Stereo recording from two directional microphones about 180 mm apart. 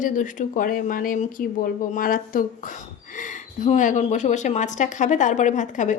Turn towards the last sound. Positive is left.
turn(degrees=45)  # may be behind; listen again after turning